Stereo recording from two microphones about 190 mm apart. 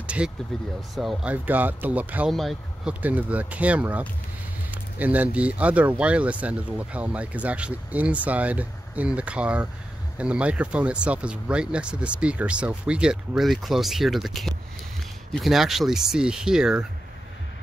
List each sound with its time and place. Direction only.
0.0 s vehicle: 5° right (ahead or behind)
0.5 s speech: centre (ahead or behind)